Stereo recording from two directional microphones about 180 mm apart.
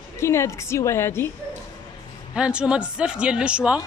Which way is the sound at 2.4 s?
5° right (ahead or behind).